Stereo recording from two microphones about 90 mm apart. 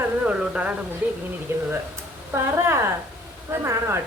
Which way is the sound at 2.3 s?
25° right (ahead or behind).